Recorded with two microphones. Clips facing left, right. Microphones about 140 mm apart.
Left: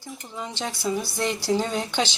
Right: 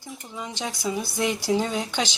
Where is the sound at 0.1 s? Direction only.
5° right (ahead or behind).